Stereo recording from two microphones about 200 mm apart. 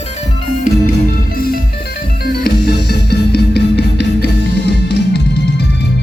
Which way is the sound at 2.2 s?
50° left (ahead or behind).